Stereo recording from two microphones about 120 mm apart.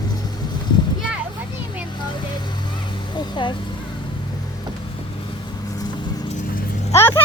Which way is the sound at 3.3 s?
40° left (ahead or behind).